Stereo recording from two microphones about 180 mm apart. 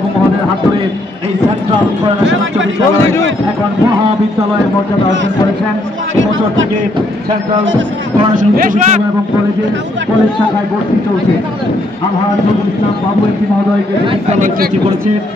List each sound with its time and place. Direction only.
8.4 s speech: 45° right (ahead or behind)
14.0 s speech: 40° right (ahead or behind)